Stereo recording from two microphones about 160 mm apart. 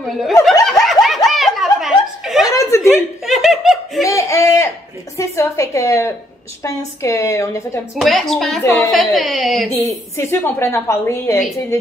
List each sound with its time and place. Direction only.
0.2 s speech: centre (ahead or behind)
0.7 s snicker: centre (ahead or behind)
2.4 s chuckle: 20° left (ahead or behind)
2.9 s laughter: centre (ahead or behind)
4.0 s a sound: 20° left (ahead or behind)
5.1 s a woman's voice: 20° left (ahead or behind)
8.0 s speech: centre (ahead or behind)
9.8 s a woman's voice: 15° left (ahead or behind)